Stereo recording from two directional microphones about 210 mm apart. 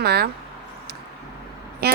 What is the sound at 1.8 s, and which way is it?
Speech, 50° right (ahead or behind).